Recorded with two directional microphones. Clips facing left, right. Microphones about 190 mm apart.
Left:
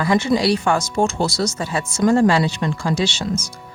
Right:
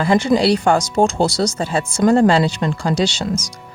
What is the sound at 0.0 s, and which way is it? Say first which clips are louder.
A woman's voice: right 3 dB; 30° right (ahead or behind).